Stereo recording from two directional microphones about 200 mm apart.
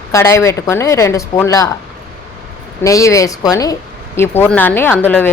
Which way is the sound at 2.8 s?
15° left (ahead or behind).